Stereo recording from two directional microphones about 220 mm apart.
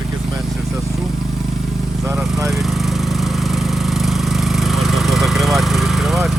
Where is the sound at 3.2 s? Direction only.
Centre (ahead or behind).